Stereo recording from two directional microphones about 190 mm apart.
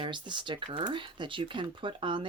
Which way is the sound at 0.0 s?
25° right (ahead or behind).